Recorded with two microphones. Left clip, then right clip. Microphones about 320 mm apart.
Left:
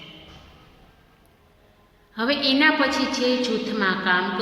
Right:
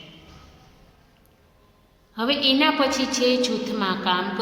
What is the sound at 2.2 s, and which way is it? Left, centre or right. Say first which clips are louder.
A woman's voice: even; centre.